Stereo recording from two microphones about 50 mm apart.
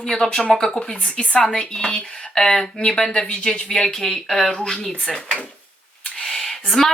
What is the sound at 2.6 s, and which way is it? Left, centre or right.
Speech, left.